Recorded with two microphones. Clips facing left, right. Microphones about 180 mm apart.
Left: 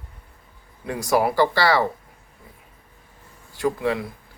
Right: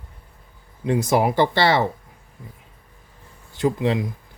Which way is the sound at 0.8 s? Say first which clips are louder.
Right 2 dB; 20° right (ahead or behind).